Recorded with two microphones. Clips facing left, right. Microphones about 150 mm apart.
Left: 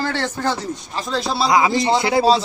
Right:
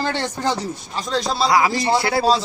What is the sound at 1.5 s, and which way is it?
Speech, 20° left (ahead or behind).